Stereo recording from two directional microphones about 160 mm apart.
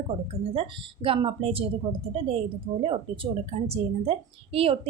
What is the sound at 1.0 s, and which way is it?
A woman's voice, 35° right (ahead or behind).